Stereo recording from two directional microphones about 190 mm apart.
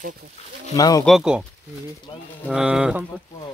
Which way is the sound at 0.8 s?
20° left (ahead or behind).